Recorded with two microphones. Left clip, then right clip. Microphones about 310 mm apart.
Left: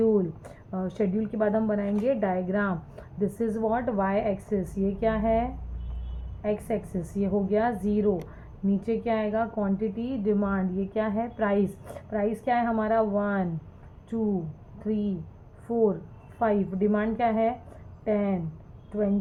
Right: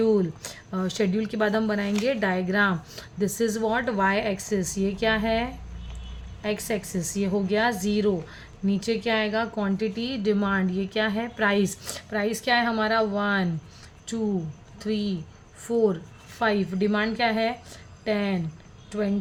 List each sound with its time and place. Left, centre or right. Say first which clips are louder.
0.0 s speech: right 1 dB; right
15.6 s speech: right 2 dB; right